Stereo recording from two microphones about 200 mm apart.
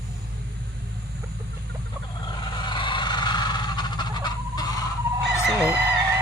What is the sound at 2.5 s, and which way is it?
Fowl, 25° left (ahead or behind).